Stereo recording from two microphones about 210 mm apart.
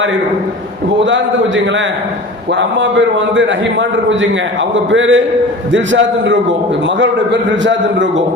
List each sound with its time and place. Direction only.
2.6 s a man's voice: 60° right (ahead or behind)